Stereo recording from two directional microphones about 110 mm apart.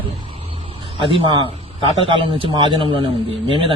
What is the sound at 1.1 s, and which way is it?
A man's voice, 50° right (ahead or behind).